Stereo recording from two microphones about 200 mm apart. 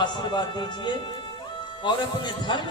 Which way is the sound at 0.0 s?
20° left (ahead or behind).